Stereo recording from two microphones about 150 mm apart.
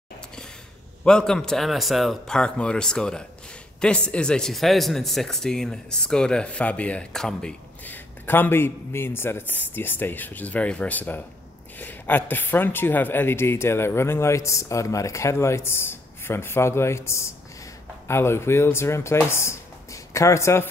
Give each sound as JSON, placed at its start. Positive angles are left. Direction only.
{"t": 1.0, "sound": "speech", "side_deg": 5}